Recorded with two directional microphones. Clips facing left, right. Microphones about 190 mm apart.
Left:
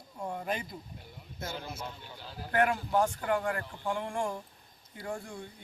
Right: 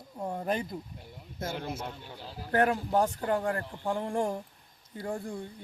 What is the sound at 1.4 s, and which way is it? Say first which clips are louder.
Speech: right 4 dB; 55° right (ahead or behind).